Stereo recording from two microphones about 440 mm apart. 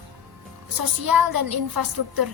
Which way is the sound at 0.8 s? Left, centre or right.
Right.